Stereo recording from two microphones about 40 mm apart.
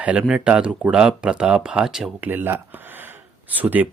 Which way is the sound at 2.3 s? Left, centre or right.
Right.